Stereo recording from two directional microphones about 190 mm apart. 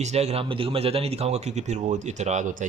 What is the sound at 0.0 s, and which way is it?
Speech, 35° right (ahead or behind).